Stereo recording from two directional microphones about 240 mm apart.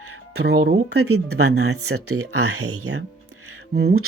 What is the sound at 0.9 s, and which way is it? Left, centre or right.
Speech, right.